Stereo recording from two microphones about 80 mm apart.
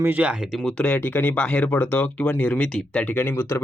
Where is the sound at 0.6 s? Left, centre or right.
Centre.